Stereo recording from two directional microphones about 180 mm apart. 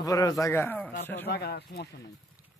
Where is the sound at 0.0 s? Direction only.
20° left (ahead or behind).